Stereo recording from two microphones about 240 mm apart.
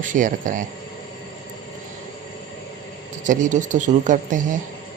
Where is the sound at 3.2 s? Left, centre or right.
Right.